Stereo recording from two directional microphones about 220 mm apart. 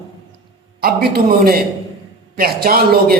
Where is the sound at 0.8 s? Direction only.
45° right (ahead or behind).